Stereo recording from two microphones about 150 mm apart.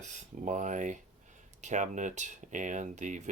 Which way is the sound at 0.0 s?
55° right (ahead or behind).